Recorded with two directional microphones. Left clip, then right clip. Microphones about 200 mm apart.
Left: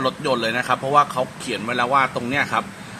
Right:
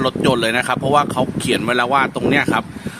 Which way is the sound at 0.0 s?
45° right (ahead or behind).